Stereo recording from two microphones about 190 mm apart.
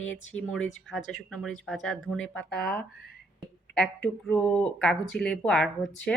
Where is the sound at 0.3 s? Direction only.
5° left (ahead or behind).